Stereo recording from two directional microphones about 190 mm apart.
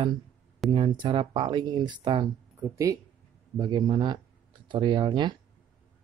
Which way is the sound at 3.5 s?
20° right (ahead or behind).